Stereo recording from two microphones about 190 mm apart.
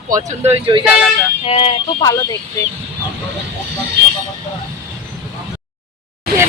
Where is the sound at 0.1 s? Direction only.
40° right (ahead or behind).